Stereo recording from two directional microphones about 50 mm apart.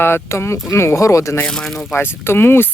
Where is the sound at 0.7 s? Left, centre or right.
Left.